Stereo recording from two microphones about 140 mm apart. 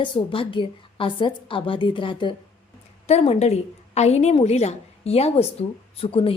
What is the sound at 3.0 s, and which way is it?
A woman's voice, 50° left (ahead or behind).